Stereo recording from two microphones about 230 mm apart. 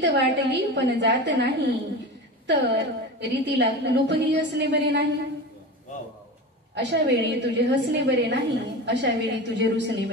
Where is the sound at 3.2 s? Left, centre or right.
Right.